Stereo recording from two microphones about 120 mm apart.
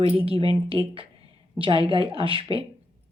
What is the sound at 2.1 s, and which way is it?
Speech, 50° right (ahead or behind).